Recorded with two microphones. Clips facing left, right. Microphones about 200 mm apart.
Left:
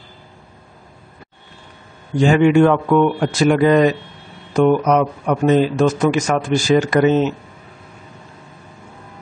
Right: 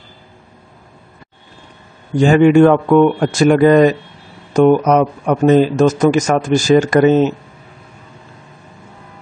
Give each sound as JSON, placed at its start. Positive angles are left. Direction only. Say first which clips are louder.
{"t": 2.2, "sound": "speech", "louder": "right 4 dB", "side_deg": -45}